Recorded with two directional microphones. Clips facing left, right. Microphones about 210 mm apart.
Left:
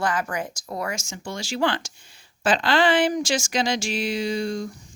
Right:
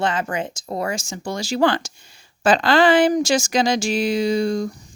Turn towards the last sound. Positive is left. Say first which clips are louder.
# right 6 dB
turn(degrees=-40)  # may be behind; listen again after turning